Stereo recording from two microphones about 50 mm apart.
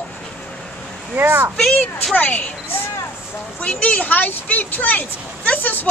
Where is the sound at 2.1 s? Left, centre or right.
Left.